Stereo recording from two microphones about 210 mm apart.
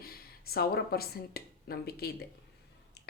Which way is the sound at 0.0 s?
45° left (ahead or behind).